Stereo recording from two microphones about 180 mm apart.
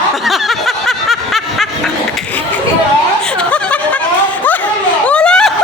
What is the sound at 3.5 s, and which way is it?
Snicker, 5° left (ahead or behind).